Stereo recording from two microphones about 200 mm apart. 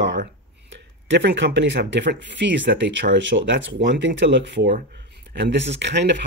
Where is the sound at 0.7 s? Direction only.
60° right (ahead or behind).